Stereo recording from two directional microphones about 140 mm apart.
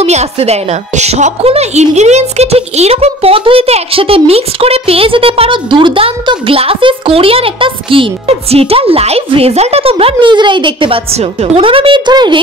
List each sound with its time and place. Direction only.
0.0 s a woman's voice: 50° right (ahead or behind); by 12.4 s 30° right (ahead or behind)